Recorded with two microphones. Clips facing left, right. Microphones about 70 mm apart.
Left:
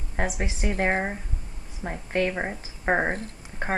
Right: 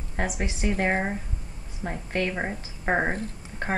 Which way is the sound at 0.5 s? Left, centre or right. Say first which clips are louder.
Right 2 dB; centre.